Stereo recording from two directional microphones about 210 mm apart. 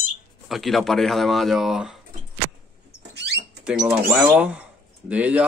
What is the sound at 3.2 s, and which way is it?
Rodents, 50° right (ahead or behind).